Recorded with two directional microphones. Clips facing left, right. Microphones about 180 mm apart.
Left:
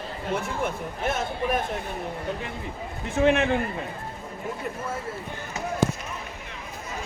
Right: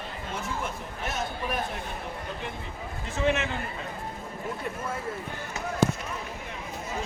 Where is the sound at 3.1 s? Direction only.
55° left (ahead or behind).